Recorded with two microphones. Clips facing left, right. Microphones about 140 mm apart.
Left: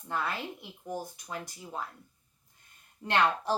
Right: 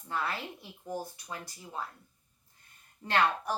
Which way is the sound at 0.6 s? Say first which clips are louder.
Even; 15° left (ahead or behind).